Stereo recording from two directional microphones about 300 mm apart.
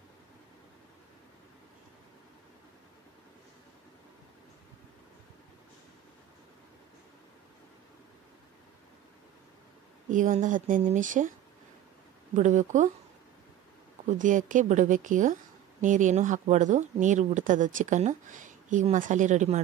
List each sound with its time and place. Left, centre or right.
10.1 s speech: right
12.4 s speech: right
14.0 s speech: right